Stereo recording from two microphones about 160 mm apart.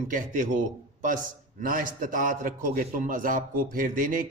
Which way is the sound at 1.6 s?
60° right (ahead or behind).